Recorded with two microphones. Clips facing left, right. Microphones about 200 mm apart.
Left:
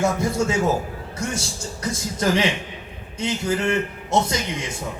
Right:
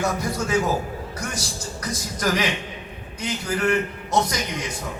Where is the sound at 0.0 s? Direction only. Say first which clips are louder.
Left 4 dB; 25° left (ahead or behind).